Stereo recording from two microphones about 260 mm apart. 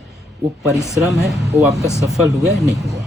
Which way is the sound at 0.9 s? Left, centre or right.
Centre.